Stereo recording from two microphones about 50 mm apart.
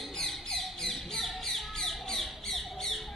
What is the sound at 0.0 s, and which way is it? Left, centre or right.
Bird, centre.